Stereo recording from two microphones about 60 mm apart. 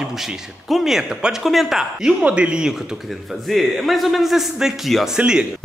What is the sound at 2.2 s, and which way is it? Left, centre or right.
Speech, centre.